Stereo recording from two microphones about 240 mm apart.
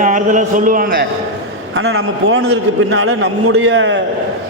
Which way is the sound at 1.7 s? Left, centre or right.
Right.